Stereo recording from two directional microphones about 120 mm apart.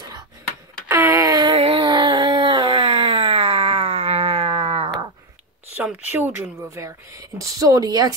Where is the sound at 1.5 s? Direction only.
50° right (ahead or behind).